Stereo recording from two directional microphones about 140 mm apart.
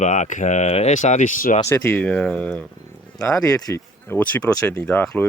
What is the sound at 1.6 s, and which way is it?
Speech, 15° left (ahead or behind).